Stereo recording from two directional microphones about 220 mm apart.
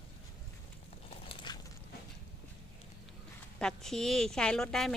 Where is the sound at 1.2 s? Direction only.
20° left (ahead or behind).